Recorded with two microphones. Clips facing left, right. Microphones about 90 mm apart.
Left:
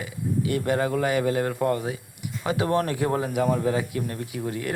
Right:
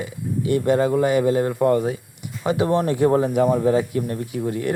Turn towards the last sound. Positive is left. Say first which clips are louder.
# right 5 dB
turn(degrees=-30)  # may be behind; listen again after turning